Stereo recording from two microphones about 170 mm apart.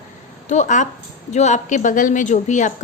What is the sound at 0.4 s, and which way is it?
A woman's voice, 45° left (ahead or behind).